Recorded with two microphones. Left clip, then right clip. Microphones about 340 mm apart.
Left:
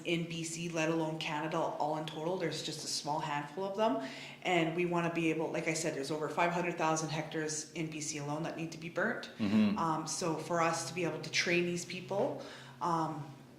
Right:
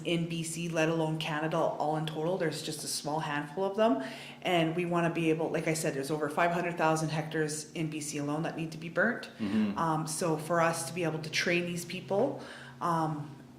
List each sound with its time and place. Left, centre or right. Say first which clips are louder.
0.0 s a woman's voice: right 3 dB; right